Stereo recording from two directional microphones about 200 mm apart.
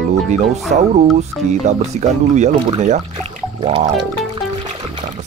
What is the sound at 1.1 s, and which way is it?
Speech, 35° right (ahead or behind).